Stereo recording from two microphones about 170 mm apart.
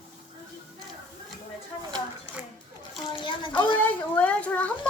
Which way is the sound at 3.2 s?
25° left (ahead or behind).